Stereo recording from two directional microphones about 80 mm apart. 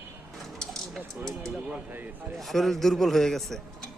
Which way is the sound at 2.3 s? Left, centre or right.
Centre.